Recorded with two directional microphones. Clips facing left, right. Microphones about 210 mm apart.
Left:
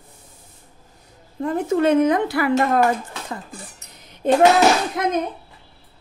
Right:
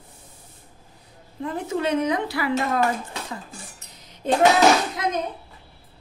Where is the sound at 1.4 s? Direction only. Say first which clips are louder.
Left 7 dB; 50° left (ahead or behind).